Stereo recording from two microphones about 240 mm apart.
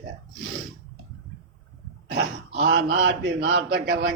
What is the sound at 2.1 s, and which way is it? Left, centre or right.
A man's voice, right.